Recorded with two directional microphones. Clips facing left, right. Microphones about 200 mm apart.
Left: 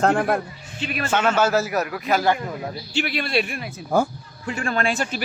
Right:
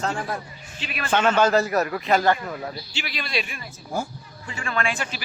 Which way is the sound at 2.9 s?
55° left (ahead or behind).